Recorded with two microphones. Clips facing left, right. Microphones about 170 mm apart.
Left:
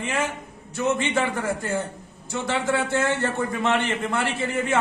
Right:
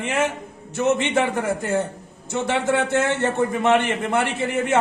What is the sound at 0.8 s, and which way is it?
A man's voice, 20° right (ahead or behind).